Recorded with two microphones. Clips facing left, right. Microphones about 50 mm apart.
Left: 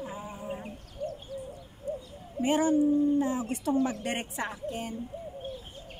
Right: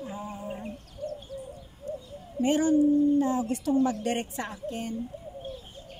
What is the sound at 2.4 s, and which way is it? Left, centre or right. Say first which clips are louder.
A woman's voice: right 2 dB; centre.